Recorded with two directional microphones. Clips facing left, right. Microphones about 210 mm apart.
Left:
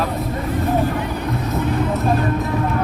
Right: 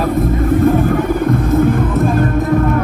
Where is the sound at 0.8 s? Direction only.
50° right (ahead or behind).